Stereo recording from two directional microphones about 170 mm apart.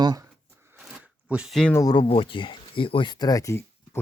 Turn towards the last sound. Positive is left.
turn(degrees=20)  # may be behind; listen again after turning